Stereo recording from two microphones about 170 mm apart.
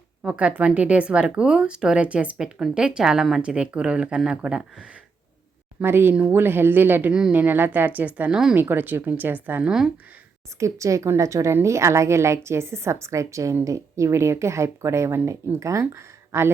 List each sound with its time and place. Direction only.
0.2 s a woman's voice: 5° right (ahead or behind)
10.6 s a woman's voice: 20° right (ahead or behind)